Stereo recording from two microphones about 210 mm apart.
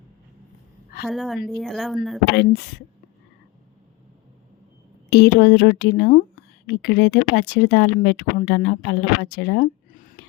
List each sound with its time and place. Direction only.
1.0 s speech: centre (ahead or behind)
2.3 s speech: 50° left (ahead or behind)
5.1 s speech: 50° left (ahead or behind)